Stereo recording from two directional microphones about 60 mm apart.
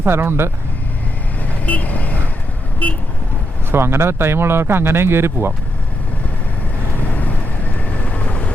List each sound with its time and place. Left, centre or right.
0.0 s speech: right
1.6 s speech: left
2.8 s vehicle: left
3.7 s speech: right
7.1 s vehicle: left